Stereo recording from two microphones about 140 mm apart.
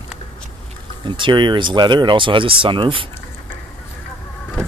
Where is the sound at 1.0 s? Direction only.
35° right (ahead or behind).